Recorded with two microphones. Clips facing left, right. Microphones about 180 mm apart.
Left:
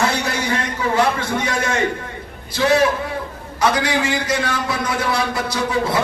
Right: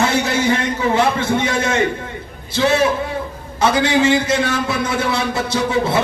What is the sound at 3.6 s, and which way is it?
A man's voice, 25° right (ahead or behind).